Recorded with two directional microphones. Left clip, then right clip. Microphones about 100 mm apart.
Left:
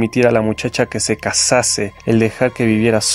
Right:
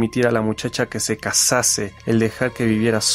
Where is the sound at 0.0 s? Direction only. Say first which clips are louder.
Left 5 dB; 20° left (ahead or behind).